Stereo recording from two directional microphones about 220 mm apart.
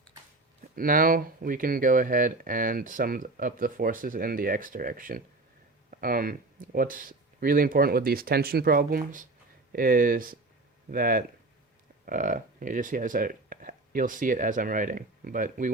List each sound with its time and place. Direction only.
0.8 s speech: 40° right (ahead or behind)